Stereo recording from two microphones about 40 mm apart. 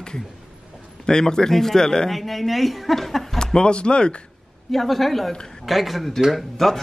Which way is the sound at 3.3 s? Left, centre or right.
Left.